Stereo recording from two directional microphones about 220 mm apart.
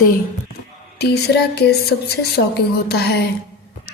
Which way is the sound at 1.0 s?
50° left (ahead or behind).